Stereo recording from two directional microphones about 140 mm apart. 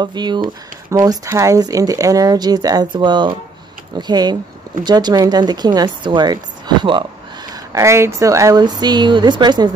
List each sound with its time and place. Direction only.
0.0 s speech: 30° right (ahead or behind)
7.7 s speech: 20° right (ahead or behind)